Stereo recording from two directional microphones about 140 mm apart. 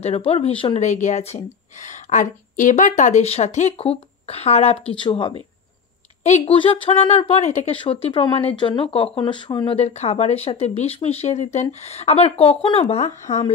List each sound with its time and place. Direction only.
0.0 s speech: 45° left (ahead or behind)
0.7 s speech: 60° left (ahead or behind); by 5.3 s 35° left (ahead or behind)
6.4 s speech: 40° left (ahead or behind)